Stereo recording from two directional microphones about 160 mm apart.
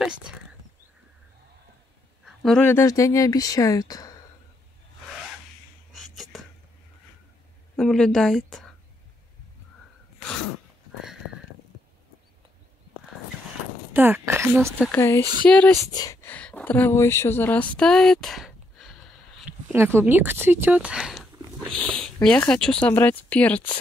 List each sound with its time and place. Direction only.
2.2 s speech: 5° left (ahead or behind); by 4.2 s 25° left (ahead or behind)
7.7 s a woman's voice: 5° left (ahead or behind)
13.9 s speech: 15° right (ahead or behind)
14.9 s speech: 15° left (ahead or behind)
15.8 s speech: 25° left (ahead or behind)
16.3 s speech: 10° left (ahead or behind)
19.7 s speech: 15° right (ahead or behind); by 23.7 s 10° left (ahead or behind)